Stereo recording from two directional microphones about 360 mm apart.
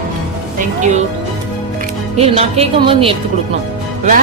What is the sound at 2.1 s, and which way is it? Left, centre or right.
Speech, centre.